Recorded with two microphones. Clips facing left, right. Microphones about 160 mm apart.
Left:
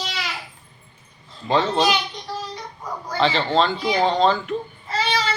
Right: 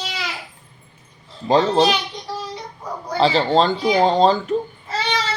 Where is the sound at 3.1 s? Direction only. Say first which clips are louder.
Right 3 dB; 35° right (ahead or behind).